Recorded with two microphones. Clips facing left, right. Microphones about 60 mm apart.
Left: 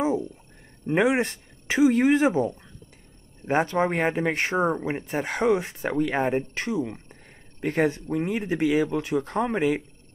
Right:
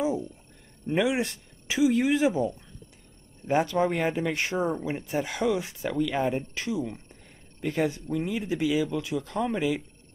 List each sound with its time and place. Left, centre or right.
0.9 s speech: left